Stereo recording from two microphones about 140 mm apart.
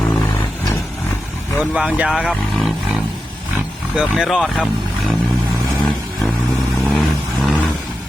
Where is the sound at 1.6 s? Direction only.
5° right (ahead or behind).